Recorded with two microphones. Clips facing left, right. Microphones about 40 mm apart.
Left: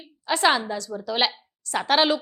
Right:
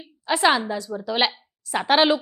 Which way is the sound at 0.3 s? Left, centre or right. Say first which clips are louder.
Right 1 dB; centre.